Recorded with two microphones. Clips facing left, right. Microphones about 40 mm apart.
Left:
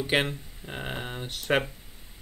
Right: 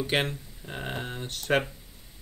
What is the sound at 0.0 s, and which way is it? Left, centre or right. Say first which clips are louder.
Speech: left 1 dB; centre.